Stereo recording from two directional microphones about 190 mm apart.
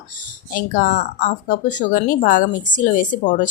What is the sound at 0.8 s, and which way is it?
A woman's voice, 40° left (ahead or behind).